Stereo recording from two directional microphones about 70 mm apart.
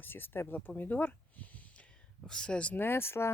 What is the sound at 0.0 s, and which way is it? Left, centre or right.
Speech, left.